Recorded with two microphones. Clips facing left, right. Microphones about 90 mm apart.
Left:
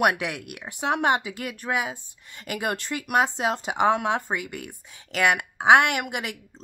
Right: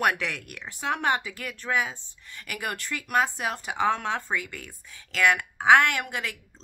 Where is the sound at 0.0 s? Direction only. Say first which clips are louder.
Left 3 dB; 15° left (ahead or behind).